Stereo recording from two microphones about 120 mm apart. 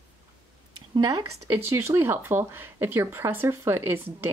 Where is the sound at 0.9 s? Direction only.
35° right (ahead or behind).